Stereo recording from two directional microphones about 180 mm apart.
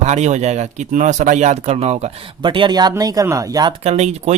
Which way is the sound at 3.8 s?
35° right (ahead or behind).